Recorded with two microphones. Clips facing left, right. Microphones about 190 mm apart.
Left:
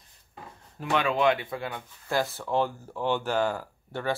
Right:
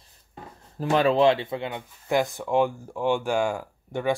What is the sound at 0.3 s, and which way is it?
Speech, 35° right (ahead or behind).